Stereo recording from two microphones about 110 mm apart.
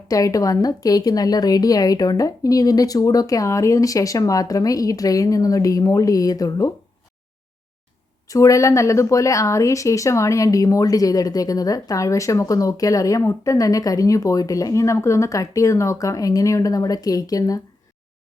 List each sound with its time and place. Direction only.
0.1 s a woman's voice: 30° left (ahead or behind)
8.3 s a woman's voice: 30° left (ahead or behind)